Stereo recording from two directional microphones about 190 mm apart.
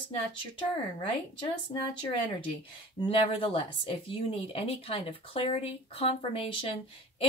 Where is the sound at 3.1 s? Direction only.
30° left (ahead or behind).